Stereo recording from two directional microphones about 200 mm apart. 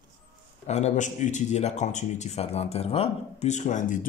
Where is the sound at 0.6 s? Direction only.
35° left (ahead or behind).